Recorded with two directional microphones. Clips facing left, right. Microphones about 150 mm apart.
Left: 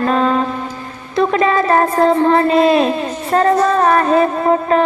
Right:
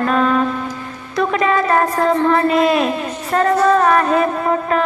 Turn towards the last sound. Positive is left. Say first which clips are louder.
# left 4 dB
turn(degrees=30)  # may be behind; listen again after turning